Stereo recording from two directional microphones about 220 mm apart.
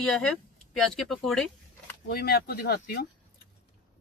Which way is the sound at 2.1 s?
45° left (ahead or behind).